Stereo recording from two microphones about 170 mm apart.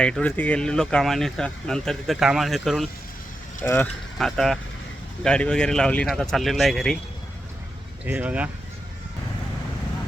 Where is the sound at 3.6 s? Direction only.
10° left (ahead or behind).